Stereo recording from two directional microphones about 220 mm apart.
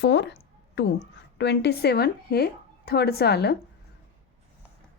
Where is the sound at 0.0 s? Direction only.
50° left (ahead or behind).